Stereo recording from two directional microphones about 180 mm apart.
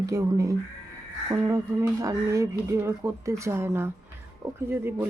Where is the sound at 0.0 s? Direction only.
20° right (ahead or behind).